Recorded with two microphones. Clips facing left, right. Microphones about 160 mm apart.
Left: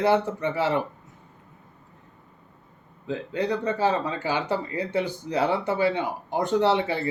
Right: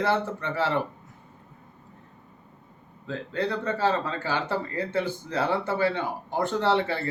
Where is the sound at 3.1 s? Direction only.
15° left (ahead or behind).